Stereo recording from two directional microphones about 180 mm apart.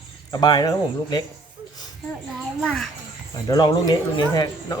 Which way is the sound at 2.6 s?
Centre (ahead or behind).